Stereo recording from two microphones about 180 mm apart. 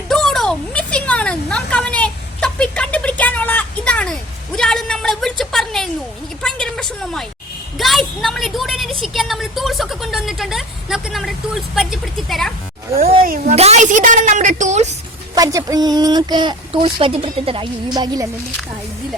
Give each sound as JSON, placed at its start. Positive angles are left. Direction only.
{"t": 0.1, "sound": "a sound", "side_deg": 0}
{"t": 6.4, "sound": "a woman's voice", "side_deg": 5}
{"t": 13.2, "sound": "a woman's voice", "side_deg": -50}
{"t": 13.6, "sound": "a woman's voice", "side_deg": -40}
{"t": 15.4, "sound": "a woman's voice", "side_deg": -20}